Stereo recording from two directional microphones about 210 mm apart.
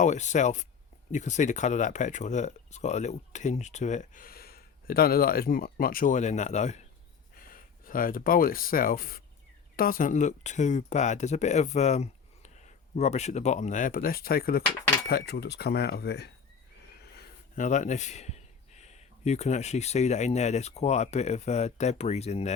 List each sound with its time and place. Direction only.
0.0 s speech: 35° left (ahead or behind); by 16.3 s 50° left (ahead or behind)
17.5 s speech: 35° left (ahead or behind)